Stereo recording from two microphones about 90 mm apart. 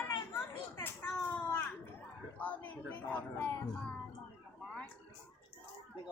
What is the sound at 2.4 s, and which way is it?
A man's voice, 20° left (ahead or behind).